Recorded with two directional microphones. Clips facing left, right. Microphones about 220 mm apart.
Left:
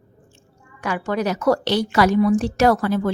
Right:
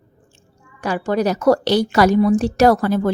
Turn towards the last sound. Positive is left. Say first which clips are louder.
# right 3 dB
turn(degrees=-40)  # may be behind; listen again after turning